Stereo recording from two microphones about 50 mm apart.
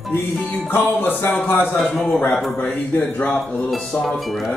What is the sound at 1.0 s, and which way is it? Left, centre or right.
Speech, left.